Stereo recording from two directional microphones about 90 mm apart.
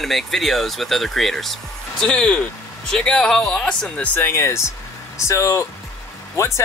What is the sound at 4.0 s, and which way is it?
Speech, 20° left (ahead or behind).